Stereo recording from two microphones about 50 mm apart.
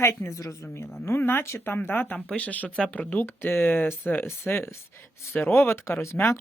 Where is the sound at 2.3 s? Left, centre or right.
Left.